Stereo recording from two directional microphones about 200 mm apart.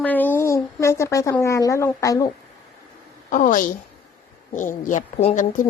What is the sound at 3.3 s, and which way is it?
A woman's voice, 40° left (ahead or behind).